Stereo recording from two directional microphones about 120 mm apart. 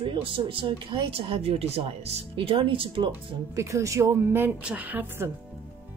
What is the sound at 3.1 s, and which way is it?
Speech, 25° right (ahead or behind).